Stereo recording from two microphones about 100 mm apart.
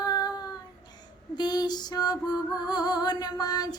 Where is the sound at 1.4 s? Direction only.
45° left (ahead or behind).